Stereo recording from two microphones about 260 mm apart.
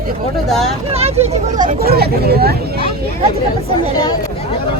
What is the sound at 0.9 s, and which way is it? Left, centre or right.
Speech, right.